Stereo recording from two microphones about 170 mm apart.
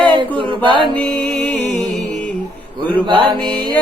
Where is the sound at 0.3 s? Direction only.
30° right (ahead or behind).